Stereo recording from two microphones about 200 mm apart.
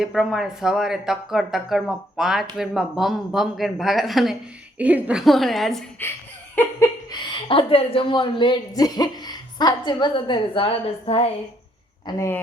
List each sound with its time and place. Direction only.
0.0 s speech: centre (ahead or behind)
6.6 s laughter: 15° left (ahead or behind)
7.4 s speech: 25° left (ahead or behind)
12.0 s speech: 15° left (ahead or behind)